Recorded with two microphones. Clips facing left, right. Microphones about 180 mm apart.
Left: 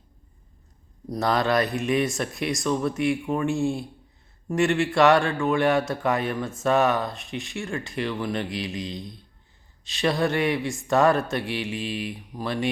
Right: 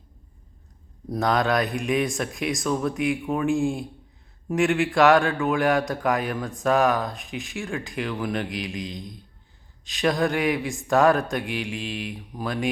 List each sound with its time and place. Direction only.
1.1 s a man's voice: centre (ahead or behind)